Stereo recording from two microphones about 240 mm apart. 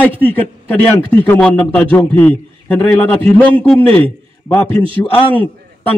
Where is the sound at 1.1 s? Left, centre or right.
Centre.